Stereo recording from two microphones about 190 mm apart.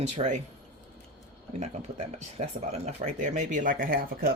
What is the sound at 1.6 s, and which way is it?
Speech, 35° right (ahead or behind).